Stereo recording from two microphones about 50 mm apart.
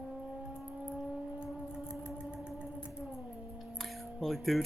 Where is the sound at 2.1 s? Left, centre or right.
Right.